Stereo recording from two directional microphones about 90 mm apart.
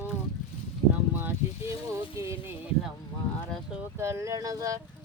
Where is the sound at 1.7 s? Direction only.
35° right (ahead or behind).